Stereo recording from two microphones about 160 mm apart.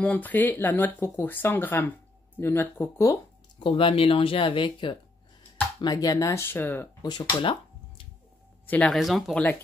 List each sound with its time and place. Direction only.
0.0 s speech: 10° left (ahead or behind)
3.5 s speech: 35° left (ahead or behind); by 6.9 s 10° left (ahead or behind)
7.0 s speech: 25° left (ahead or behind)
8.6 s speech: 10° left (ahead or behind)